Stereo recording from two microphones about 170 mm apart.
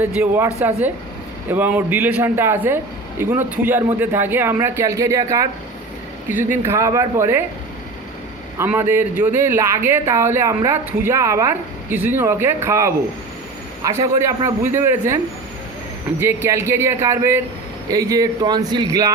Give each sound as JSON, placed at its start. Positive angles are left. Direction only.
{"t": 0.0, "sound": "a woman's voice", "side_deg": -10}
{"t": 6.7, "sound": "a woman's voice", "side_deg": -20}
{"t": 8.5, "sound": "a woman's voice", "side_deg": -15}
{"t": 16.2, "sound": "a woman's voice", "side_deg": -15}